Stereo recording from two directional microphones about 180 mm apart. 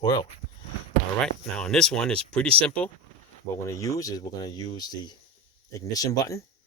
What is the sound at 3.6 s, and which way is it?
Speech, 20° left (ahead or behind).